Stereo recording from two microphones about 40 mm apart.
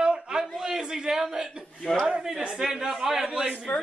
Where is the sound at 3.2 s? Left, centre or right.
Centre.